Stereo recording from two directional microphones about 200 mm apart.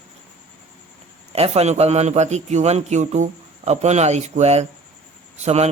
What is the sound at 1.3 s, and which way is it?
A man's voice, 30° right (ahead or behind).